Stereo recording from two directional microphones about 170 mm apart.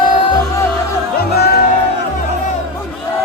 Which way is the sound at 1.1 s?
65° left (ahead or behind).